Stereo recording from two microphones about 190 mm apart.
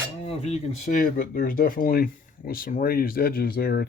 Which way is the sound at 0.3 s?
35° left (ahead or behind).